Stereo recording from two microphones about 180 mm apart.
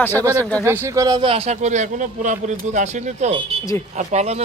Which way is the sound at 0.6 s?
10° right (ahead or behind).